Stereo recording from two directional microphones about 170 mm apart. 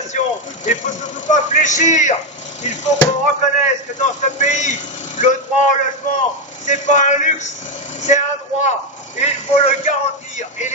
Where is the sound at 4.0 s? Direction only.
45° left (ahead or behind).